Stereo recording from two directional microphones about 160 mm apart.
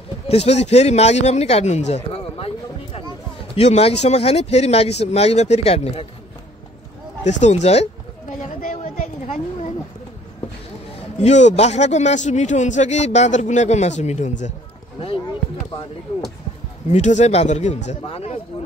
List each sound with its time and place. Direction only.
0.3 s speech: 40° left (ahead or behind)
7.2 s a man's voice: 45° left (ahead or behind)
8.4 s a sound: 60° left (ahead or behind)
11.1 s a man's voice: 45° left (ahead or behind)
16.9 s a man's voice: 45° left (ahead or behind)